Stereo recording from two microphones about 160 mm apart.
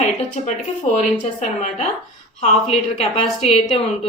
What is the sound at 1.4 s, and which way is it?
Speech, 50° left (ahead or behind).